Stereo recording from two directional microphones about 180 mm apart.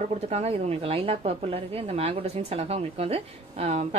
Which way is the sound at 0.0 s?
35° right (ahead or behind).